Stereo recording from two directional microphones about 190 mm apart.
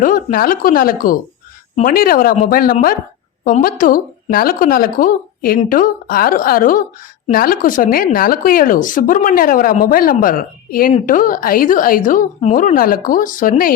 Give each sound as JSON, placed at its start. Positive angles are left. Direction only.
{"t": 0.0, "sound": "speech", "side_deg": 50}